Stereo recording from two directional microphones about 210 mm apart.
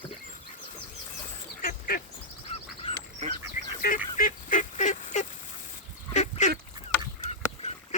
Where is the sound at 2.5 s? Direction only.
25° left (ahead or behind).